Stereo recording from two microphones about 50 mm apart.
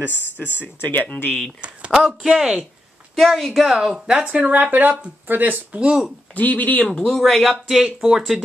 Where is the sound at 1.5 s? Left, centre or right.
Right.